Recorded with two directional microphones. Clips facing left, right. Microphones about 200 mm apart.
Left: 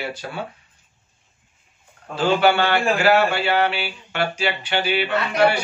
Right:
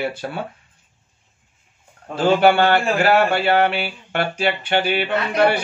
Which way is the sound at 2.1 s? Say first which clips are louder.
Right 3 dB; 50° right (ahead or behind).